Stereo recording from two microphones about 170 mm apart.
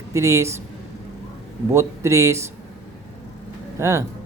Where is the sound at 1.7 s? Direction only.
15° right (ahead or behind).